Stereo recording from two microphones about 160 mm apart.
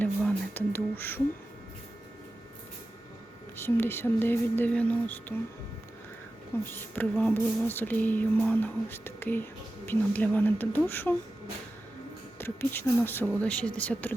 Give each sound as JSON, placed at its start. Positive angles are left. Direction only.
{"t": 0.0, "sound": "a sound", "side_deg": 10}
{"t": 3.6, "sound": "music", "side_deg": 15}
{"t": 6.7, "sound": "music", "side_deg": 10}
{"t": 12.4, "sound": "music", "side_deg": 15}